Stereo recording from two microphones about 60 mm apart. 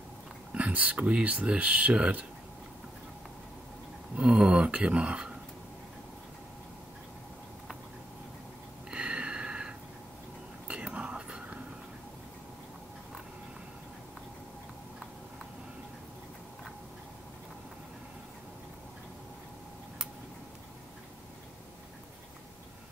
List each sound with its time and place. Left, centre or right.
0.5 s speech: right
4.2 s speech: centre
8.9 s a sound: centre
10.7 s whispering: centre